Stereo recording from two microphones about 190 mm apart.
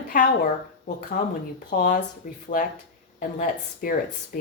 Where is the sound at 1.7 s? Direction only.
45° left (ahead or behind).